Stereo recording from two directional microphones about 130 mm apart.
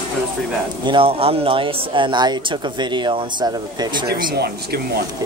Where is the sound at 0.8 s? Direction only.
45° right (ahead or behind).